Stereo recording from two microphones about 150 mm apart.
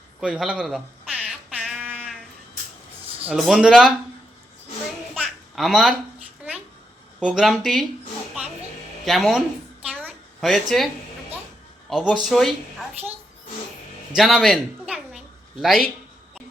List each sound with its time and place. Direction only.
0.2 s a sound: 5° right (ahead or behind)
3.2 s speech: centre (ahead or behind)
5.2 s a sound: centre (ahead or behind)
7.2 s speech: 5° right (ahead or behind)
9.0 s speech: centre (ahead or behind)
9.9 s a sound: 10° right (ahead or behind)
10.4 s speech: centre (ahead or behind)
11.9 s speech: centre (ahead or behind)
14.2 s speech: centre (ahead or behind)